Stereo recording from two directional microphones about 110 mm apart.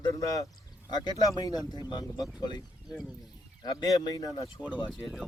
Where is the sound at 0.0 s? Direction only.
30° left (ahead or behind).